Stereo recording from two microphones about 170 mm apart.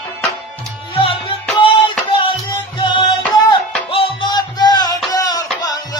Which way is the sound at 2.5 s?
30° left (ahead or behind).